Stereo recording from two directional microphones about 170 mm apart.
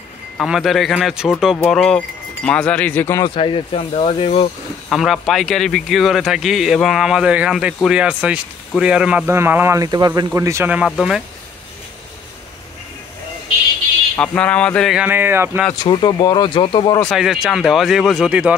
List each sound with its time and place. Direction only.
0.4 s a man's voice: centre (ahead or behind)
3.3 s speech: 30° left (ahead or behind)
4.8 s a man's voice: centre (ahead or behind)
10.9 s a man's voice: centre (ahead or behind)
14.1 s speech: 5° left (ahead or behind)
15.0 s speech: 10° right (ahead or behind)
15.8 s speech: 25° left (ahead or behind)
17.0 s a man's voice: centre (ahead or behind)